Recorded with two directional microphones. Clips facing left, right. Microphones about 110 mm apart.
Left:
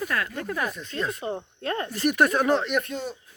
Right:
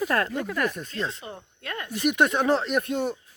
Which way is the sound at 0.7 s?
45° right (ahead or behind).